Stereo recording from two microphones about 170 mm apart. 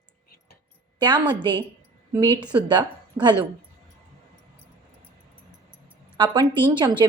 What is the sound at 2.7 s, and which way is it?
Speech, 25° right (ahead or behind).